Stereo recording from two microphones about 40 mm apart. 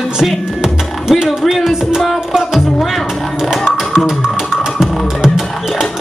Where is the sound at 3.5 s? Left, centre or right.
Centre.